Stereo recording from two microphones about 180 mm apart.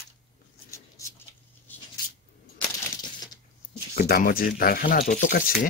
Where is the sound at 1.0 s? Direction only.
15° left (ahead or behind).